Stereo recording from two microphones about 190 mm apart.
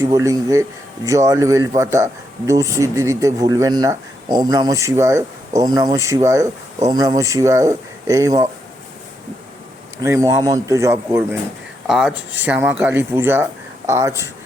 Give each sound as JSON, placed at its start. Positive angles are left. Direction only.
{"t": 0.0, "sound": "a man's voice", "side_deg": -15}
{"t": 10.0, "sound": "a man's voice", "side_deg": -15}
{"t": 11.9, "sound": "a man's voice", "side_deg": 0}